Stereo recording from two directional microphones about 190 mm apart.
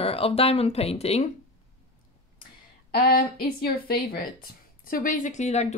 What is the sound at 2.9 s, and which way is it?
Speech, 50° left (ahead or behind).